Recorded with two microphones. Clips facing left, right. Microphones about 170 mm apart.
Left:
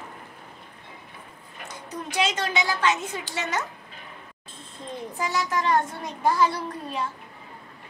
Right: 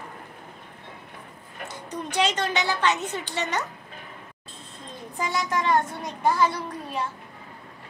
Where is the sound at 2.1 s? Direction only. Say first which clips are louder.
Right 1 dB; 10° left (ahead or behind).